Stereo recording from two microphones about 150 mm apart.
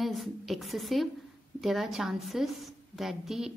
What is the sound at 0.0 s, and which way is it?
A woman's voice, centre (ahead or behind).